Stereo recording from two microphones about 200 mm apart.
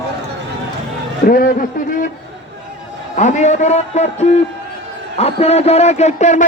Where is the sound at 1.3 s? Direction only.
40° left (ahead or behind).